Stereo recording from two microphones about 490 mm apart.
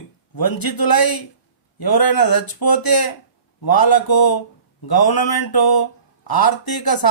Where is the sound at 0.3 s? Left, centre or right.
Left.